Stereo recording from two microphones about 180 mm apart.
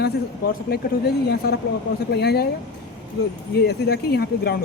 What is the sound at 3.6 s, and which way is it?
Speech, 65° left (ahead or behind).